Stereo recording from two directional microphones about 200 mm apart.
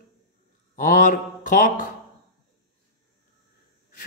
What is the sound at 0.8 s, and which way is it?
A man's voice, 40° left (ahead or behind).